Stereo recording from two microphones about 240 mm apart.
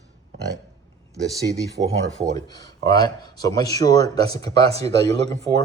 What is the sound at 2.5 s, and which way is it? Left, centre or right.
Speech, centre.